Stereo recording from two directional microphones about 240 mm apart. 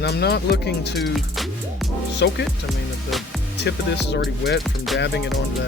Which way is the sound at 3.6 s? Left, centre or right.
Left.